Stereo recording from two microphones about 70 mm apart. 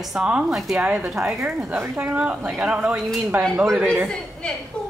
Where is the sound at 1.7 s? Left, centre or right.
Right.